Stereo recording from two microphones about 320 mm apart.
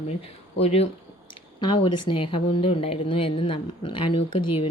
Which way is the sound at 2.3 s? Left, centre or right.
Centre.